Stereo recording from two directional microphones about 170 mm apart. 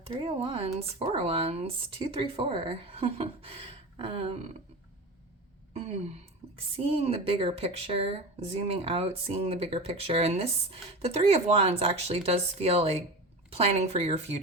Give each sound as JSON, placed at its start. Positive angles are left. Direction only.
{"t": 0.0, "sound": "speech", "side_deg": -35}
{"t": 5.7, "sound": "speech", "side_deg": -35}